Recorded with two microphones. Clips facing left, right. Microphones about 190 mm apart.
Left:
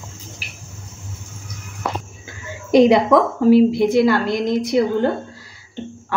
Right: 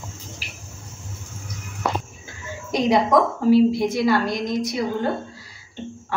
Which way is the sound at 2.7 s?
60° left (ahead or behind).